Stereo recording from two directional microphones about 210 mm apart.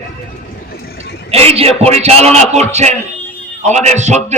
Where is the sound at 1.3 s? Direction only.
30° right (ahead or behind).